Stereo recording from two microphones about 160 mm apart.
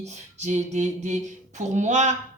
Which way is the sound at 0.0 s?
45° right (ahead or behind).